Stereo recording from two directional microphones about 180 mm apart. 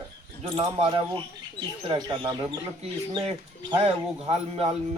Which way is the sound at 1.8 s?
25° right (ahead or behind).